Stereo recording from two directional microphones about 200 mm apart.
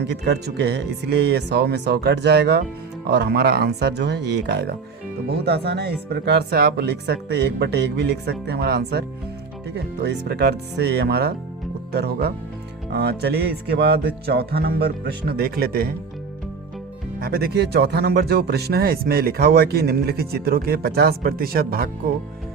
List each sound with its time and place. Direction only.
0.0 s speech: 55° right (ahead or behind)
17.2 s speech: 50° right (ahead or behind)